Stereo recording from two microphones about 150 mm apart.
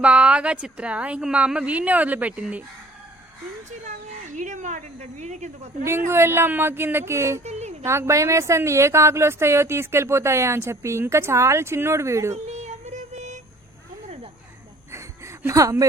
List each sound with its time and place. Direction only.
0.0 s speech: 10° right (ahead or behind)
3.7 s speech: 55° right (ahead or behind)
6.1 s speech: 15° right (ahead or behind)
7.4 s a sound: 45° right (ahead or behind)
7.9 s a woman's voice: 20° right (ahead or behind)
12.5 s music: 50° right (ahead or behind)
14.9 s a sound: 20° right (ahead or behind)